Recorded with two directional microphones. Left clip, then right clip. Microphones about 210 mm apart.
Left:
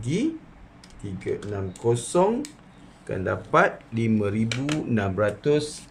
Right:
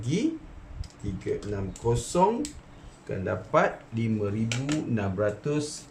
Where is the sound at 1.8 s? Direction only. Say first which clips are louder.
Left 2 dB; 20° left (ahead or behind).